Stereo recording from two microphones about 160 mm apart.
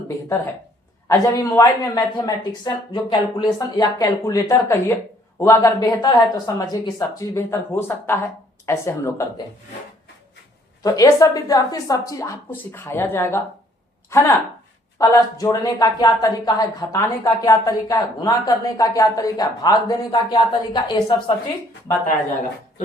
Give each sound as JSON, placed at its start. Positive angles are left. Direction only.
{"t": 1.0, "sound": "speech", "side_deg": 20}
{"t": 10.8, "sound": "speech", "side_deg": 20}